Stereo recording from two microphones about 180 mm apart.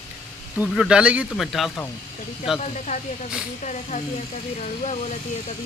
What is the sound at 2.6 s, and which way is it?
Speech, 40° left (ahead or behind).